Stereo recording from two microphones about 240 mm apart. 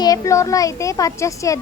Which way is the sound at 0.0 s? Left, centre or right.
Centre.